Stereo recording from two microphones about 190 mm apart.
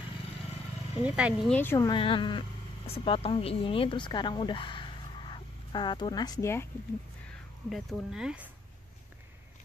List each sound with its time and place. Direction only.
1.0 s speech: 5° right (ahead or behind)
1.5 s speech: 10° left (ahead or behind)
1.9 s a woman's voice: 25° left (ahead or behind)
7.7 s speech: 5° right (ahead or behind)